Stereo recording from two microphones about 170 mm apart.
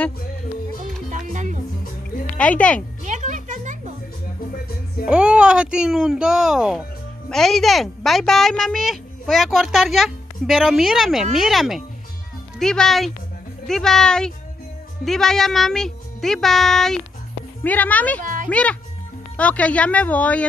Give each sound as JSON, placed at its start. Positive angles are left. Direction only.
{"t": 1.1, "sound": "music", "side_deg": -45}
{"t": 2.3, "sound": "speech", "side_deg": 10}
{"t": 3.0, "sound": "music", "side_deg": -45}
{"t": 5.0, "sound": "speech", "side_deg": -5}
{"t": 18.2, "sound": "music", "side_deg": -55}
{"t": 18.5, "sound": "speech", "side_deg": 5}